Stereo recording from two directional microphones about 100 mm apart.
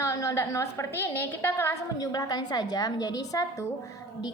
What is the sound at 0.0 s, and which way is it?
A woman's voice, 30° left (ahead or behind).